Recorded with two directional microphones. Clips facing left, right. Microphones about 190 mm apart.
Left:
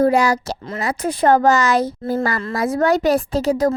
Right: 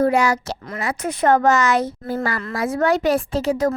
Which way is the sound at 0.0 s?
35° left (ahead or behind).